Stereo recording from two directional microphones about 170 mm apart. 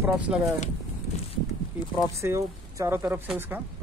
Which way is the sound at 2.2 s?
15° right (ahead or behind).